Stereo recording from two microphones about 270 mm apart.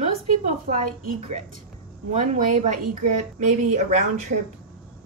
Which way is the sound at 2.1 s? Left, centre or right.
Right.